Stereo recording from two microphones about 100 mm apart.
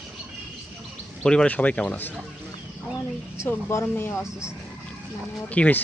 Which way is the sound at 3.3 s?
30° left (ahead or behind).